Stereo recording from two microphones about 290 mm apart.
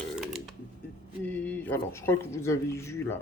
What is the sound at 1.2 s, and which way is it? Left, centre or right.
Speech, centre.